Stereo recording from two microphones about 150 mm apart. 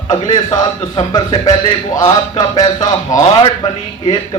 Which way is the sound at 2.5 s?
25° left (ahead or behind).